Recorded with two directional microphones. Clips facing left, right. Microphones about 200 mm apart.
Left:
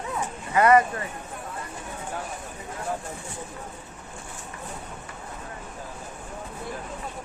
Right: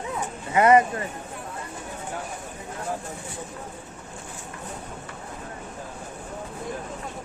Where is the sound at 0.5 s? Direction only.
20° right (ahead or behind).